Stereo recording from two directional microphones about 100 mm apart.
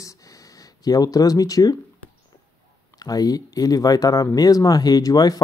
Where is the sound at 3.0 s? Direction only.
40° left (ahead or behind).